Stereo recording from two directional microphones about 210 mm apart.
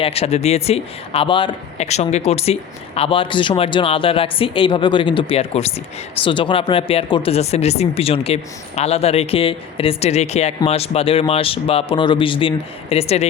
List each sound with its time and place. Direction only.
0.0 s speech: 30° left (ahead or behind)